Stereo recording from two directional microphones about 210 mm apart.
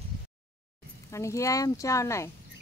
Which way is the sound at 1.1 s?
15° left (ahead or behind).